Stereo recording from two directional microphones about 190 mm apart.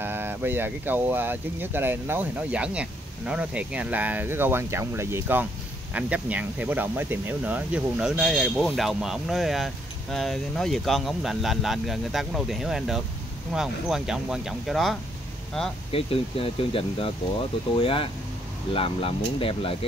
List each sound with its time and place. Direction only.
0.0 s speech: 10° right (ahead or behind)
15.9 s speech: 30° left (ahead or behind)